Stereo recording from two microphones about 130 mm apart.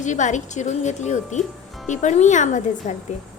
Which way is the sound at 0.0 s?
65° left (ahead or behind).